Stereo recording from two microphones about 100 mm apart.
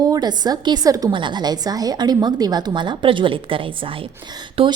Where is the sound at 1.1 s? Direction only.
50° right (ahead or behind).